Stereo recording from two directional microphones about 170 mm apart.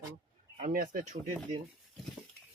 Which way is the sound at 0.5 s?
50° right (ahead or behind).